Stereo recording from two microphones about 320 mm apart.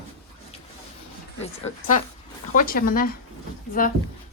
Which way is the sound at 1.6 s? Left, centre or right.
Left.